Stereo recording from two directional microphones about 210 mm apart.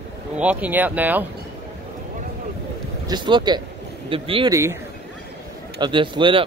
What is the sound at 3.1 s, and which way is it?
Speech, 20° right (ahead or behind).